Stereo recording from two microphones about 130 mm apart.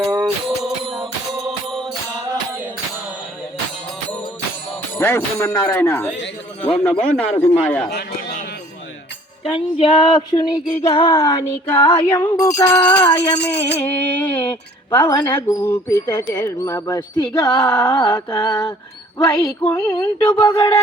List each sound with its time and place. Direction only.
0.0 s music: 20° right (ahead or behind)
0.6 s music: centre (ahead or behind)
4.9 s speech: 20° left (ahead or behind)
6.6 s a sound: 10° left (ahead or behind)
9.4 s female singing: 45° left (ahead or behind)
10.3 s music: 30° left (ahead or behind)
11.9 s speech: 35° left (ahead or behind); by 13.1 s 15° left (ahead or behind)
13.7 s a sound: 15° left (ahead or behind)
15.0 s music: 30° left (ahead or behind)
15.4 s speech: 20° left (ahead or behind)
17.8 s music: 35° left (ahead or behind)
19.2 s speech: 25° left (ahead or behind)